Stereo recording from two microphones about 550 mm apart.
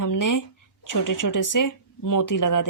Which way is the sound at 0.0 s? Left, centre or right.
Left.